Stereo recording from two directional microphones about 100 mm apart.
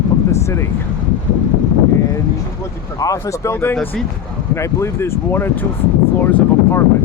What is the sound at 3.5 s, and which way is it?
Speech, 20° left (ahead or behind).